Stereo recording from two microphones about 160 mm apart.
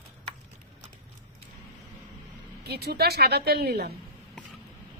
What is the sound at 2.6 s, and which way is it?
Speech, 85° right.